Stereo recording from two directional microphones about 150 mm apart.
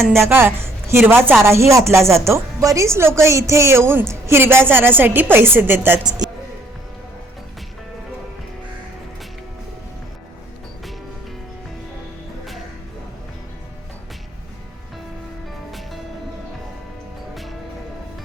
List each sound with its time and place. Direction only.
0.2 s a woman's voice: 15° right (ahead or behind)